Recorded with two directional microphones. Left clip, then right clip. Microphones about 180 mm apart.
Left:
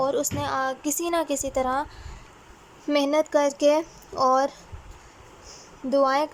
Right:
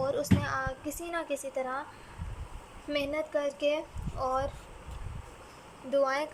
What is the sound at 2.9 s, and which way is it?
A woman's voice, 30° left (ahead or behind).